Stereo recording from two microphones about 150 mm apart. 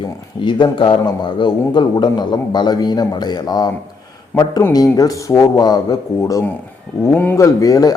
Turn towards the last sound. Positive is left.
turn(degrees=25)  # may be behind; listen again after turning